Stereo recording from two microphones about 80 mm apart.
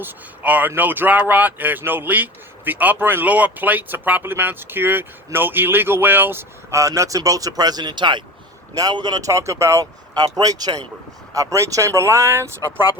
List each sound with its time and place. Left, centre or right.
0.0 s speech: right
6.7 s speech: right
8.7 s speech: right
9.8 s speech: right
11.3 s speech: right